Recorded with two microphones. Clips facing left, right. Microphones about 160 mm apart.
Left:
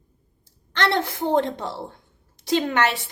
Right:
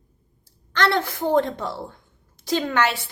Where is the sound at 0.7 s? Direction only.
25° left (ahead or behind).